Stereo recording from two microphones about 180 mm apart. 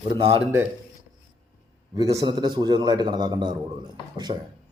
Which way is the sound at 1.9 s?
20° right (ahead or behind).